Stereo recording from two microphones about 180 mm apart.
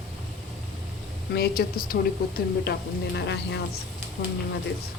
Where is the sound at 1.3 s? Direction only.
60° left (ahead or behind).